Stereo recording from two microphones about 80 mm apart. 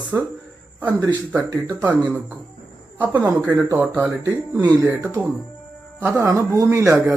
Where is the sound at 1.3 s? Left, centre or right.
Right.